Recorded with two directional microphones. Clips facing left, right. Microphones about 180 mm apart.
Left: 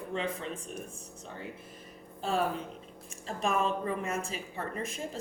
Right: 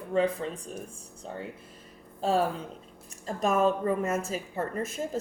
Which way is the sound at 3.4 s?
45° right (ahead or behind).